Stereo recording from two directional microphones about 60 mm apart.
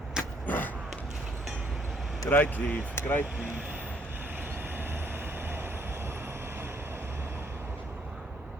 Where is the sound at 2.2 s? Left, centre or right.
Left.